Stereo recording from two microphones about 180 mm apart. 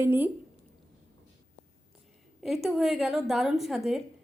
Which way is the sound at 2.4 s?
Centre (ahead or behind).